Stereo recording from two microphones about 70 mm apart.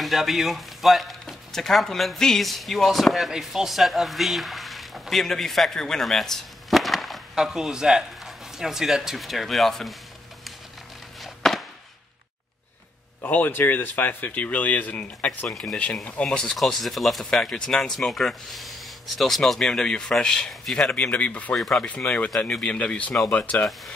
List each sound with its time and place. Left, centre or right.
0.0 s speech: centre
11.1 s a sound: centre
13.2 s speech: left
15.5 s speech: centre
21.5 s speech: centre; by 23.7 s left